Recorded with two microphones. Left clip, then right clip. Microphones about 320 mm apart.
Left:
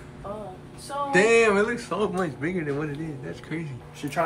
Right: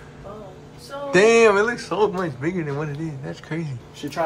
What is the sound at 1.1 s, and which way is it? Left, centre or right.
Speech, centre.